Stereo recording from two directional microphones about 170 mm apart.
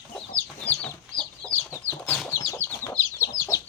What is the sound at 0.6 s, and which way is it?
Chicken, 10° left (ahead or behind).